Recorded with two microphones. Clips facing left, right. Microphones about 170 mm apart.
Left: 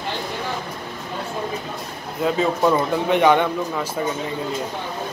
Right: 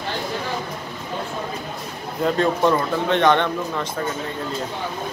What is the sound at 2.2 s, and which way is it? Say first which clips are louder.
Speech: even; 5° left (ahead or behind).